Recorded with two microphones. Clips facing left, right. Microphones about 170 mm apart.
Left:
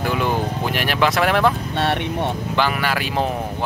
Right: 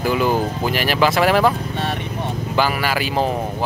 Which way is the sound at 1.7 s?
70° left (ahead or behind).